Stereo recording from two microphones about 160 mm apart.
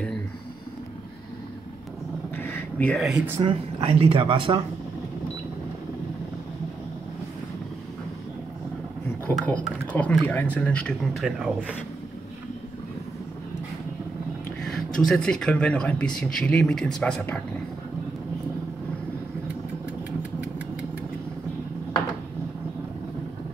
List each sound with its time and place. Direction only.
2.3 s a sound: 15° left (ahead or behind)
3.1 s speech: 5° right (ahead or behind)
3.3 s speech: 35° right (ahead or behind)
9.3 s speech: 10° left (ahead or behind)
14.6 s a sound: 5° left (ahead or behind)
15.0 s speech: 5° left (ahead or behind)
20.2 s engine: 10° right (ahead or behind)